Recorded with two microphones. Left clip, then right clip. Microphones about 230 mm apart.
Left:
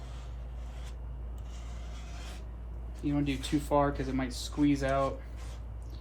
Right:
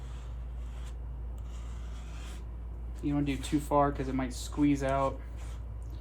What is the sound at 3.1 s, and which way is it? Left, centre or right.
Speech, right.